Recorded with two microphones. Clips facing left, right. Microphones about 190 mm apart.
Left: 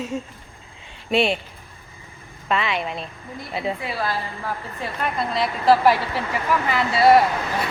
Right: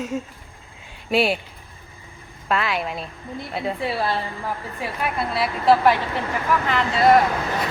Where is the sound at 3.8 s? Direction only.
30° right (ahead or behind).